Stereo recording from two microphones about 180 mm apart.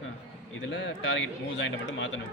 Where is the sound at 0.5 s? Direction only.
80° left.